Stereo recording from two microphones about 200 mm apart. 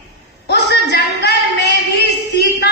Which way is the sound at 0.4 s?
55° left (ahead or behind).